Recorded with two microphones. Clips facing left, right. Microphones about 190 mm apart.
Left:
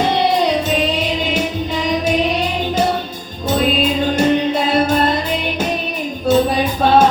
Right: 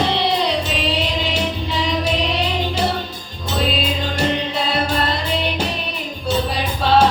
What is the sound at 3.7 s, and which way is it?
Music, 50° left (ahead or behind).